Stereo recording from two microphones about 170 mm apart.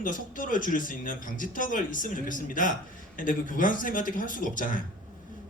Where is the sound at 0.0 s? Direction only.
50° left (ahead or behind).